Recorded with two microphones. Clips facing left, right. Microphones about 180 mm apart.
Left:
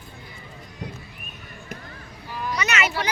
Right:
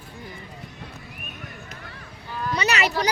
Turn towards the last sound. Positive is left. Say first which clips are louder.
# right 2 dB
turn(degrees=-40)  # may be behind; listen again after turning